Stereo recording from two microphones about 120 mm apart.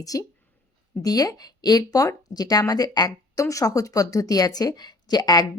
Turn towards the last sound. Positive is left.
turn(degrees=35)  # may be behind; listen again after turning